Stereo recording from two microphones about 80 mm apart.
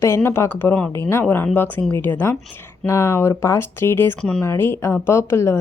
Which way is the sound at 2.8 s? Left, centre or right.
Left.